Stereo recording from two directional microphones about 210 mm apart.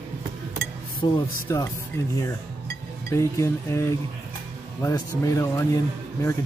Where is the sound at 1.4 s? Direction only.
15° left (ahead or behind).